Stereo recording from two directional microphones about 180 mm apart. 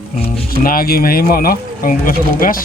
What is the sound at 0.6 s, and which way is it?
Speech, 55° left (ahead or behind).